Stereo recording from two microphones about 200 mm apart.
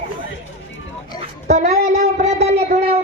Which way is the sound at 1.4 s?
35° right (ahead or behind).